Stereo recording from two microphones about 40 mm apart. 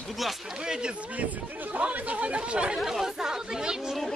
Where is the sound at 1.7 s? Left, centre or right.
Right.